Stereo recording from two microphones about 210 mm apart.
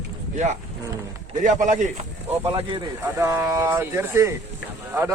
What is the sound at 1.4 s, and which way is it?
Speech, 35° right (ahead or behind).